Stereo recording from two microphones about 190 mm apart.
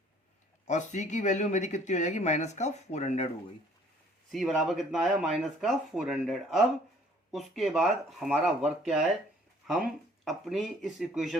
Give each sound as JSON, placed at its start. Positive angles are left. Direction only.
{"t": 0.7, "sound": "speech", "side_deg": 40}
{"t": 4.3, "sound": "speech", "side_deg": 0}